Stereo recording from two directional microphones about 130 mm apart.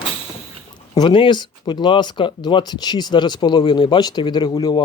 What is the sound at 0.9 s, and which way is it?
Speech, 35° left (ahead or behind).